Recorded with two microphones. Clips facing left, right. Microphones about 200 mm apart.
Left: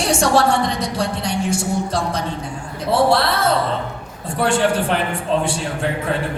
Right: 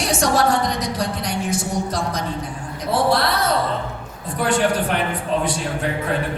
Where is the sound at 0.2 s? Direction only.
30° left (ahead or behind).